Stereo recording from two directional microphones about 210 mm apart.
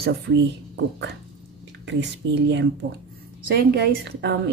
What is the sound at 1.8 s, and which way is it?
A woman's voice, 55° right (ahead or behind).